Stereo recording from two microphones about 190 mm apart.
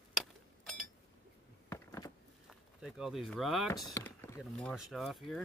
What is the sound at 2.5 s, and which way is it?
Speech, centre (ahead or behind).